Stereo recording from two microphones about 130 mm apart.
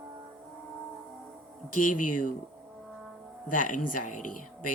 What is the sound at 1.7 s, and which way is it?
Speech, 90° left.